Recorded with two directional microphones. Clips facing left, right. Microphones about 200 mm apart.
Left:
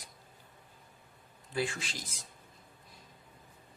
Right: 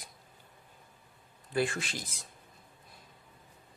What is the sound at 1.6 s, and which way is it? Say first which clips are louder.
Speech: right 4 dB; 55° right (ahead or behind).